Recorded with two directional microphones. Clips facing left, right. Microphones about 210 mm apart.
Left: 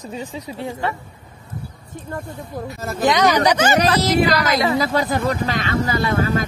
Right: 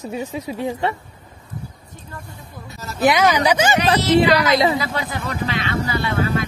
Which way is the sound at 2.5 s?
55° left (ahead or behind).